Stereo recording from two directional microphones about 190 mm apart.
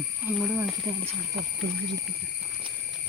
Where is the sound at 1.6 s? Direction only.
65° right (ahead or behind).